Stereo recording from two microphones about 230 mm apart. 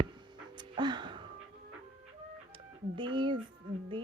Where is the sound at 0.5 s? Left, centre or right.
Centre.